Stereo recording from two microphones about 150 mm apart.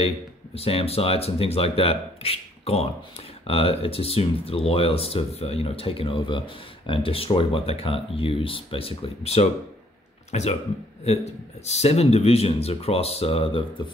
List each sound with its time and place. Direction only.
0.6 s speech: 40° left (ahead or behind)